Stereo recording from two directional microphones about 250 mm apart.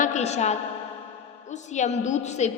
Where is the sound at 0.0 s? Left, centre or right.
Left.